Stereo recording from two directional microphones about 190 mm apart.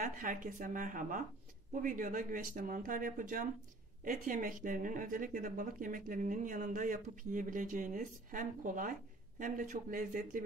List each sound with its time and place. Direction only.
0.0 s speech: 45° right (ahead or behind)